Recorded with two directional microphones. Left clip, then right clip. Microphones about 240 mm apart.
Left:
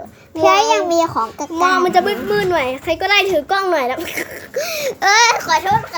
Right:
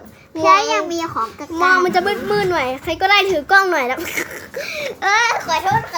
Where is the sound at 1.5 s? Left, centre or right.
Centre.